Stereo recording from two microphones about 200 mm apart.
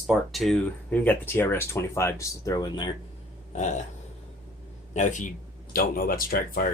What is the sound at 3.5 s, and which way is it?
Speech, 35° left (ahead or behind).